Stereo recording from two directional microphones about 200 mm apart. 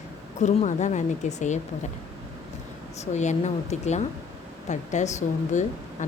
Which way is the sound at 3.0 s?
35° left (ahead or behind).